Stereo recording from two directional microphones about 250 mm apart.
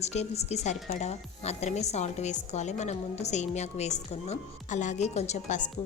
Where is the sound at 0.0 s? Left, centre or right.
Left.